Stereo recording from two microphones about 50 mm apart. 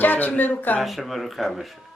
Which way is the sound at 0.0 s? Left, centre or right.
Left.